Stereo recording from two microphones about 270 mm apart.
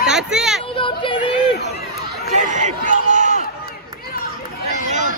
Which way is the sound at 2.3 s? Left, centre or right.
Right.